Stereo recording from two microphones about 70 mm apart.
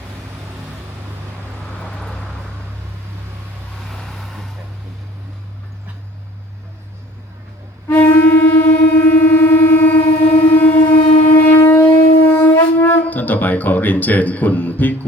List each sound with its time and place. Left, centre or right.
1.8 s vehicle: centre
3.8 s vehicle: centre
7.9 s music: left
9.1 s train: left